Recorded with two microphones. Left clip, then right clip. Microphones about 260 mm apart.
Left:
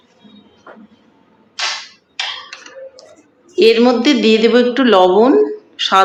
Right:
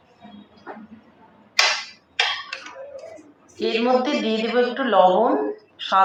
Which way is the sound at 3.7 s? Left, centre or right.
Left.